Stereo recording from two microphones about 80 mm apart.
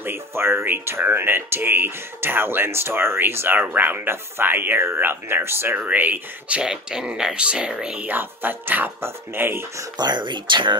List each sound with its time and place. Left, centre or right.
0.0 s speech: right
6.6 s speech: centre; by 9.7 s right
9.9 s speech: right